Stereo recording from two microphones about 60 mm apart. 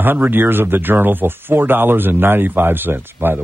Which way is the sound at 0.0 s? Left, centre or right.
Right.